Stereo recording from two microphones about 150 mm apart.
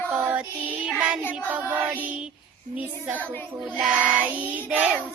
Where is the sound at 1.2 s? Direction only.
10° left (ahead or behind).